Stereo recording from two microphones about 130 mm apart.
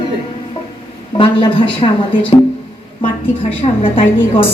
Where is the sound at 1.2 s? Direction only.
40° left (ahead or behind).